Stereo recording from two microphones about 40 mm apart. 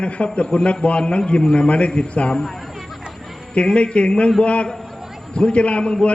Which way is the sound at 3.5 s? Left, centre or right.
Left.